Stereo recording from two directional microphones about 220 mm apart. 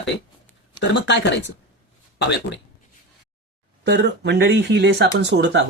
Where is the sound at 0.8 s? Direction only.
50° left (ahead or behind).